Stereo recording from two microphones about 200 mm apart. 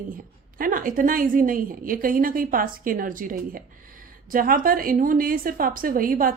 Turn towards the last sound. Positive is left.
turn(degrees=-45)  # may be behind; listen again after turning